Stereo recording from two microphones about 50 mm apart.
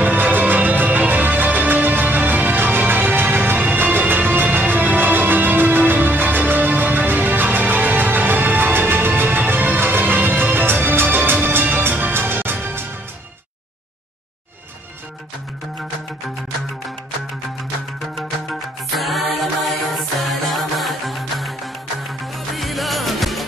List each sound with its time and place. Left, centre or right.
0.0 s music: right
18.1 s music: centre